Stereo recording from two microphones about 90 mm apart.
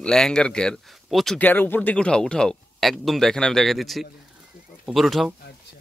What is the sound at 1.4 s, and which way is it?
Speech, 20° left (ahead or behind).